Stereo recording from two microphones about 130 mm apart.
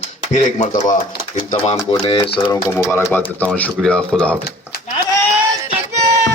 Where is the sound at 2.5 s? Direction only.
20° left (ahead or behind).